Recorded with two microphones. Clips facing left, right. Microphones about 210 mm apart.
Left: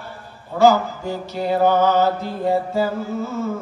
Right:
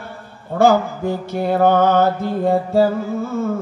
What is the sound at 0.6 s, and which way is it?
Mantra, 55° right (ahead or behind).